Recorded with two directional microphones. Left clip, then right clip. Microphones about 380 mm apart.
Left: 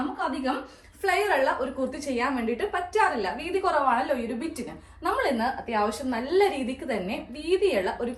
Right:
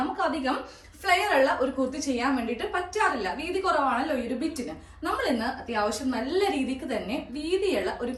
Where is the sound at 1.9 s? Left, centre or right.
Centre.